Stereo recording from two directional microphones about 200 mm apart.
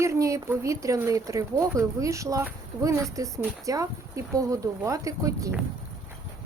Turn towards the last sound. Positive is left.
turn(degrees=-15)  # may be behind; listen again after turning